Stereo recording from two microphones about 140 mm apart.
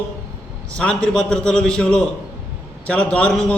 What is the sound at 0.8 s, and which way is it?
A man's voice, 5° left (ahead or behind).